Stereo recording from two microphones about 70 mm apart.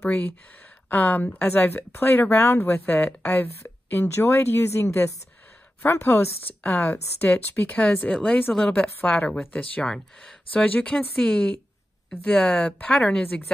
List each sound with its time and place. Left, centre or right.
0.0 s speech: left
9.8 s speech: centre
10.5 s speech: left
12.1 s speech: left